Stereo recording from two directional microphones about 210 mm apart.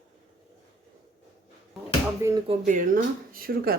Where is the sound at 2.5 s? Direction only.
35° right (ahead or behind).